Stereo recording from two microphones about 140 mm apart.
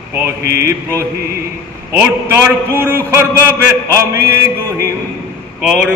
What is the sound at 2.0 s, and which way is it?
Mantra, 15° right (ahead or behind).